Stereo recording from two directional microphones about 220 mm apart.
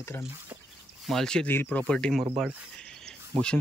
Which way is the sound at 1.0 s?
Centre (ahead or behind).